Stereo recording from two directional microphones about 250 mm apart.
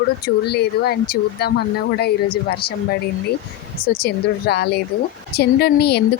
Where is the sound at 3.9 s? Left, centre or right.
Left.